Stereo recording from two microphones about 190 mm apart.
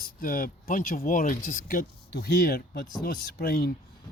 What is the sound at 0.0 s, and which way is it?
Speech, 50° left (ahead or behind).